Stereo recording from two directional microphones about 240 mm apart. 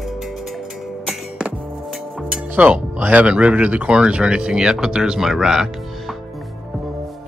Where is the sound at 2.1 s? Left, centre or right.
Centre.